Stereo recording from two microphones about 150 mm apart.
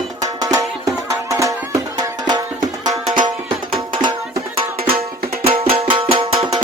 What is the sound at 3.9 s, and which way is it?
Music, 30° right (ahead or behind).